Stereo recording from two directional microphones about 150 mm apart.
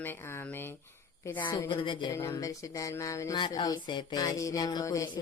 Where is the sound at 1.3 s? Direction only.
30° left (ahead or behind).